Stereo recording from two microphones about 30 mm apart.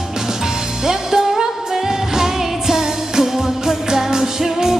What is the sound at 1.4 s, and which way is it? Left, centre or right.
Music, centre.